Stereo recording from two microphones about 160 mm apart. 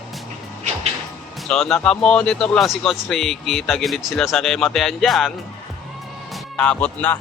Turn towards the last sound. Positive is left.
turn(degrees=10)  # may be behind; listen again after turning